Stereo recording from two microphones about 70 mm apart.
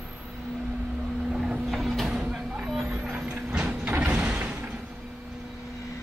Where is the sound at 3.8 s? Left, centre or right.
Right.